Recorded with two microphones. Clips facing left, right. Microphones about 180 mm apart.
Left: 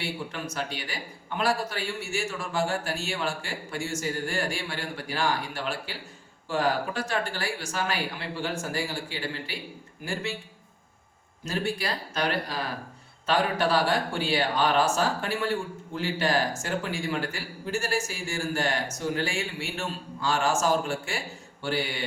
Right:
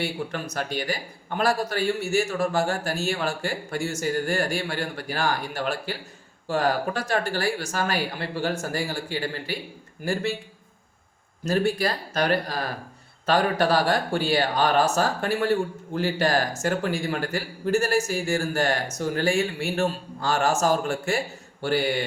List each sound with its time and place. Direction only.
0.0 s a man's voice: 40° right (ahead or behind)
11.4 s a man's voice: 40° right (ahead or behind)
19.7 s a man's voice: 60° right (ahead or behind)
20.3 s a man's voice: 40° right (ahead or behind)